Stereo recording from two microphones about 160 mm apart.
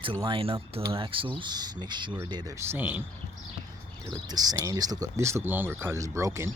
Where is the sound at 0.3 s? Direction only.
35° right (ahead or behind); by 3.0 s 10° right (ahead or behind).